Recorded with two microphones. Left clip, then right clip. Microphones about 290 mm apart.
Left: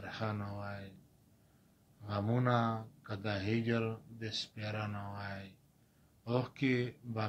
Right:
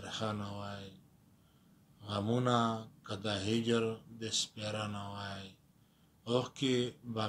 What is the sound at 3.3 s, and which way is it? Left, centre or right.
Speech, right.